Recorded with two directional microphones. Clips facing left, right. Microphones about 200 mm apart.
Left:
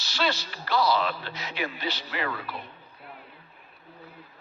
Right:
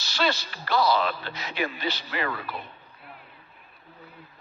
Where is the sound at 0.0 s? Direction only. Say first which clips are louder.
Right 2 dB; 50° right (ahead or behind).